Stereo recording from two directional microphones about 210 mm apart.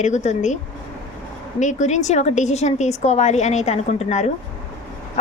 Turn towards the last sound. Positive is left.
turn(degrees=30)  # may be behind; listen again after turning